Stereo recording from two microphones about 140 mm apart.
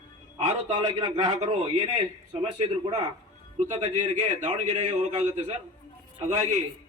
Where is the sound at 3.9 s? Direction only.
65° right (ahead or behind).